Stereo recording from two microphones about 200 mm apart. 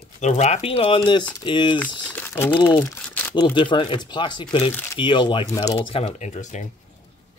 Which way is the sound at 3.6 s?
25° left (ahead or behind).